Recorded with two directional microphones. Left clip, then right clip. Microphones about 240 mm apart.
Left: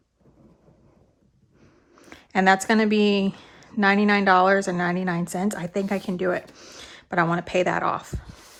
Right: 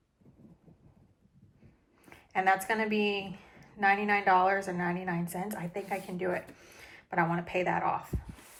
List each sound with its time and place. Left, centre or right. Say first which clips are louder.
2.0 s a woman's voice: left 8 dB; centre